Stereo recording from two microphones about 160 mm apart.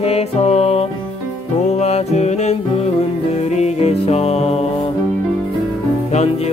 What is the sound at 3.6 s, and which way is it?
Music, 45° left (ahead or behind).